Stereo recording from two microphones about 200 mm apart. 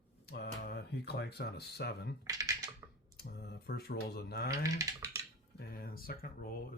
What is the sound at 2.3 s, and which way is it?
Computer keyboard, 15° right (ahead or behind).